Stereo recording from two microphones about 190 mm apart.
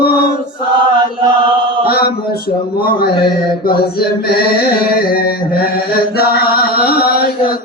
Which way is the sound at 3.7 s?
55° left (ahead or behind).